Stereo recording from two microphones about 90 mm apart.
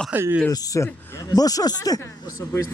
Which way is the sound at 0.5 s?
40° left (ahead or behind).